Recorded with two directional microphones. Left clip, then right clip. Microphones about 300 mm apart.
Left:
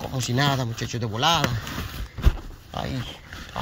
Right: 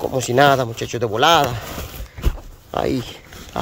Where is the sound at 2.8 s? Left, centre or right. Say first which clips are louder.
Right 10 dB; centre.